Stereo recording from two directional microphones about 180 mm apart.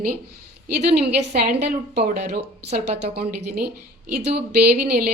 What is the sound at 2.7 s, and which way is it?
Speech, 35° right (ahead or behind).